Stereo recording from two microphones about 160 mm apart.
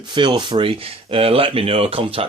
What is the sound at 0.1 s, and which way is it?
Speech, 30° right (ahead or behind).